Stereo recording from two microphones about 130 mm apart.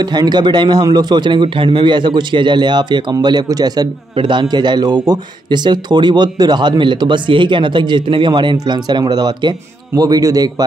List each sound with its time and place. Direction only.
0.0 s a man's voice: 35° right (ahead or behind)